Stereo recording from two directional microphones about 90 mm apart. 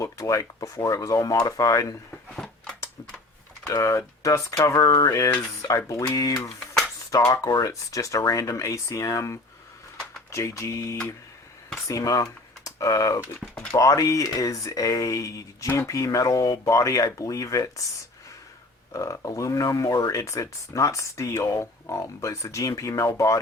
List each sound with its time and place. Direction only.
0.0 s speech: 35° left (ahead or behind)
2.3 s a sound: 5° left (ahead or behind)
3.7 s speech: 40° left (ahead or behind)
18.9 s speech: 35° left (ahead or behind)